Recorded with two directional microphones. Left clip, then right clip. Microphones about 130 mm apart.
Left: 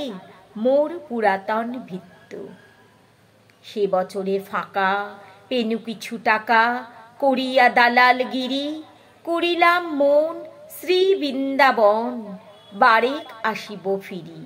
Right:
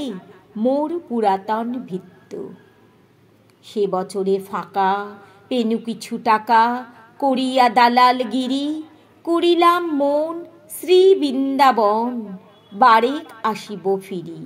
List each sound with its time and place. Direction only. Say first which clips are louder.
0.6 s a woman's voice: left 1 dB; 25° right (ahead or behind)
3.6 s a woman's voice: even; 30° right (ahead or behind)